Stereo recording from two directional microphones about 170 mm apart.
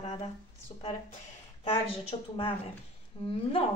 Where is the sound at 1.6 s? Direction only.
35° left (ahead or behind).